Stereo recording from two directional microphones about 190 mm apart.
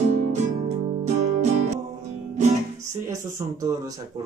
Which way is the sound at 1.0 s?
35° right (ahead or behind).